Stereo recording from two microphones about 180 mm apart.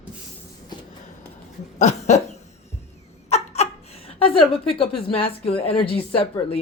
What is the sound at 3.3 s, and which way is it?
A woman's voice, 35° left (ahead or behind).